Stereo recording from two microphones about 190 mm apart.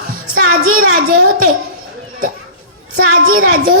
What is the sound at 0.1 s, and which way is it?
Music, 50° right (ahead or behind).